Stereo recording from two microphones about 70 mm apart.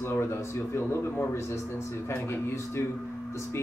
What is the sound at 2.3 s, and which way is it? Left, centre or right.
Speech, left.